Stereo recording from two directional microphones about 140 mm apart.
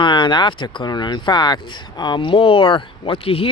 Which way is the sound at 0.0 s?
35° left (ahead or behind).